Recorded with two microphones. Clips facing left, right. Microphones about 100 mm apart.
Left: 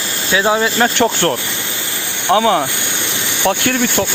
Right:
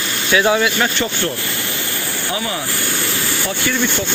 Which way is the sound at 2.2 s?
70° left (ahead or behind).